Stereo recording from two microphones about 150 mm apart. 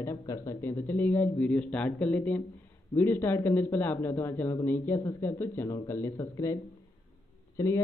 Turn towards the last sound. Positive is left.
turn(degrees=20)  # may be behind; listen again after turning